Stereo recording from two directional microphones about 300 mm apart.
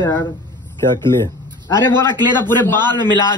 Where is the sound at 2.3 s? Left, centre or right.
Centre.